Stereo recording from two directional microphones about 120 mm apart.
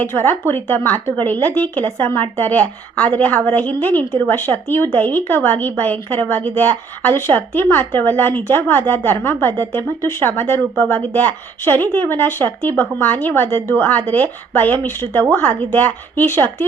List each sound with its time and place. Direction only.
0.0 s a woman's voice: 20° left (ahead or behind)